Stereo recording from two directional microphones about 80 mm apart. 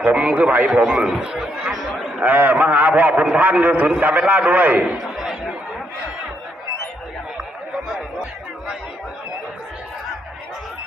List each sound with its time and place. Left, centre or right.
0.0 s a man's voice: centre
2.2 s a man's voice: right
5.1 s chatter: centre
7.9 s chatter: centre